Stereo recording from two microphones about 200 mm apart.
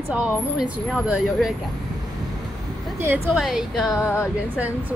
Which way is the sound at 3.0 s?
15° right (ahead or behind).